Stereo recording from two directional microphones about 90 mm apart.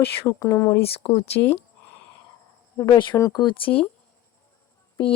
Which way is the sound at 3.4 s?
75° left (ahead or behind).